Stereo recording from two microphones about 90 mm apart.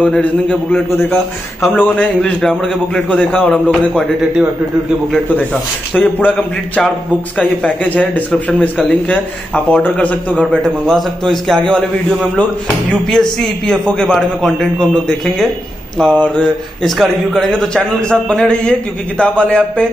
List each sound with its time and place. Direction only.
0.0 s a man's voice: 15° left (ahead or behind)
2.4 s a man's voice: 5° left (ahead or behind)
3.1 s a man's voice: 15° left (ahead or behind)
5.3 s speech: 20° left (ahead or behind)
6.3 s a man's voice: 10° left (ahead or behind)
9.7 s a man's voice: 15° left (ahead or behind)